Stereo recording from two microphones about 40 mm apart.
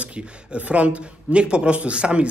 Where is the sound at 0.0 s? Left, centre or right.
Right.